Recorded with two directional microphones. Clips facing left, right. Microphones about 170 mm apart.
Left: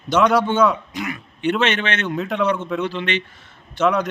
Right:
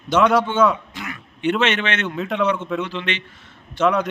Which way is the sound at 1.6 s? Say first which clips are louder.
Even; 35° left (ahead or behind).